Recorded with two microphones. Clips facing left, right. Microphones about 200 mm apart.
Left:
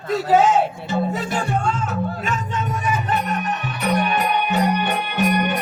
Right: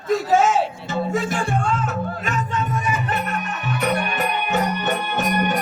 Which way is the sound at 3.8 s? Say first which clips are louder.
Left 2 dB; 50° right (ahead or behind).